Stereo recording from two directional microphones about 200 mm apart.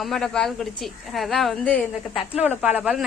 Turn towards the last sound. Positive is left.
turn(degrees=-5)  # may be behind; listen again after turning